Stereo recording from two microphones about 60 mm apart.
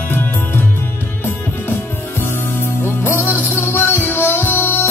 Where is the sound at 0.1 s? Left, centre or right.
Left.